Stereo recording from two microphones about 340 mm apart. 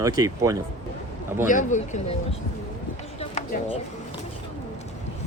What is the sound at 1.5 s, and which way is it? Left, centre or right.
Speech, left.